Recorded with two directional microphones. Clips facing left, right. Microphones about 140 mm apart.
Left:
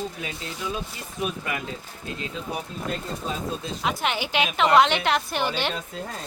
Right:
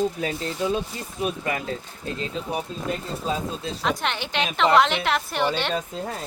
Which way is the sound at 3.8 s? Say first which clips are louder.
Even; 5° left (ahead or behind).